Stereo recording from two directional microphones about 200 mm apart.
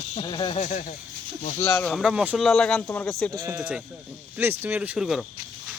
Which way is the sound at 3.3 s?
15° right (ahead or behind).